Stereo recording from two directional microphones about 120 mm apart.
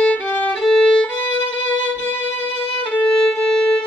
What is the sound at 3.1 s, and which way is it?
Violin, 5° left (ahead or behind).